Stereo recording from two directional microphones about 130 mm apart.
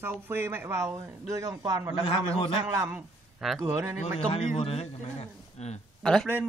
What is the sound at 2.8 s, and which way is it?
Speech, 15° right (ahead or behind).